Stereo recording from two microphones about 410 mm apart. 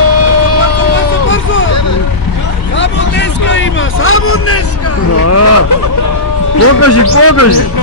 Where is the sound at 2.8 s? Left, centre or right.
Left.